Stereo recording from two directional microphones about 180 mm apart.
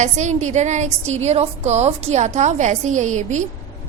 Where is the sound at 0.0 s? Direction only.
40° right (ahead or behind).